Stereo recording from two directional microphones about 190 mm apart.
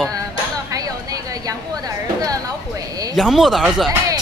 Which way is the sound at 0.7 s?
20° right (ahead or behind).